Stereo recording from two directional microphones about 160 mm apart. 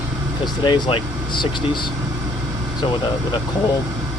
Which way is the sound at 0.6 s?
30° left (ahead or behind).